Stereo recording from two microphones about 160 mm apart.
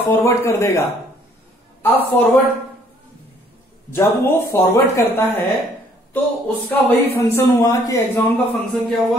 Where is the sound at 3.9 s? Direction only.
15° left (ahead or behind).